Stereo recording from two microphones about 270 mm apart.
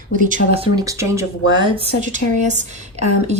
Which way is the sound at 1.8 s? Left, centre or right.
Right.